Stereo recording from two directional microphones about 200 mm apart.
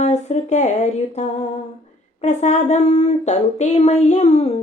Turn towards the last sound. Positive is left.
turn(degrees=30)  # may be behind; listen again after turning